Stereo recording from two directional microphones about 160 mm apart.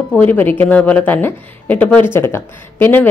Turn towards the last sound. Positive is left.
turn(degrees=15)  # may be behind; listen again after turning